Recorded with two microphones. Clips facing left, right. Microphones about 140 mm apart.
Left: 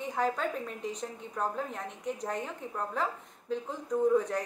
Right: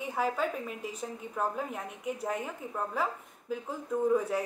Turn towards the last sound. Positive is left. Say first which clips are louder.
# left 1 dB
turn(degrees=-5)  # may be behind; listen again after turning